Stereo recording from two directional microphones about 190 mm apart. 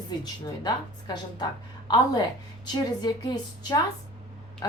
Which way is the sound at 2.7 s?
20° left (ahead or behind).